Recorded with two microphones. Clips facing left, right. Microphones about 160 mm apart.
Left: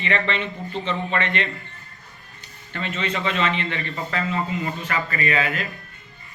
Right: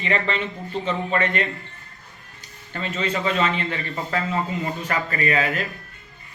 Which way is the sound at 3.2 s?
40° right (ahead or behind).